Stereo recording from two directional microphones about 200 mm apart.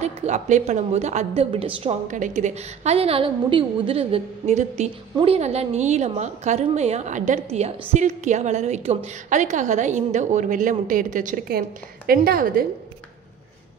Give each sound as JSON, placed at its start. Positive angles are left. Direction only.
{"t": 0.0, "sound": "a woman's voice", "side_deg": -35}